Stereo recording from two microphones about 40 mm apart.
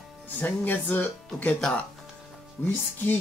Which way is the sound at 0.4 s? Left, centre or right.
Left.